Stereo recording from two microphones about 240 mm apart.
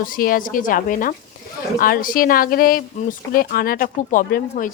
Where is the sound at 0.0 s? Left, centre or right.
Left.